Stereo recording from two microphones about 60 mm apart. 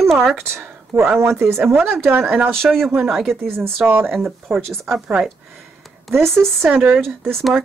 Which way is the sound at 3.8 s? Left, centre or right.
Right.